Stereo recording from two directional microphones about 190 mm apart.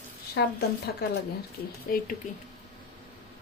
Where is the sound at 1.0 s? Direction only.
55° left (ahead or behind).